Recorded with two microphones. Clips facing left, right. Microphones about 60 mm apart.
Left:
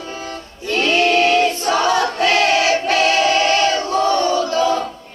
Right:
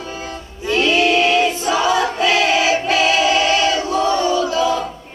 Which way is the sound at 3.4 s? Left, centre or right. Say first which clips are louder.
Left 1 dB; left.